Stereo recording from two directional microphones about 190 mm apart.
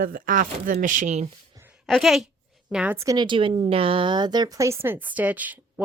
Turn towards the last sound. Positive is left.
turn(degrees=-10)  # may be behind; listen again after turning